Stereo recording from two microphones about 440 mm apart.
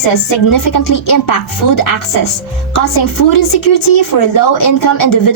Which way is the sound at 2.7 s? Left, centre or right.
Left.